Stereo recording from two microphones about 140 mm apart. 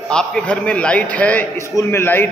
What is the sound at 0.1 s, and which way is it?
A man's voice, 5° left (ahead or behind).